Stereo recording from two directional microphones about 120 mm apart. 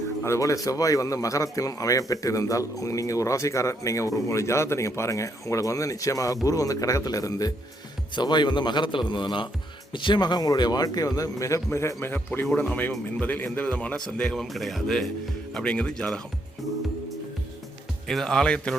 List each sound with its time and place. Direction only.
0.3 s a man's voice: 25° left (ahead or behind); by 16.2 s 5° left (ahead or behind)
18.1 s speech: 5° left (ahead or behind)